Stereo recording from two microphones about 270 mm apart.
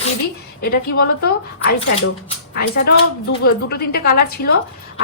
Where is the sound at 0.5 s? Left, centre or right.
Left.